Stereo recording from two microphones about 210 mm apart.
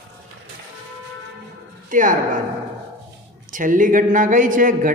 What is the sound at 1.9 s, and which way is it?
Speech, 40° right (ahead or behind).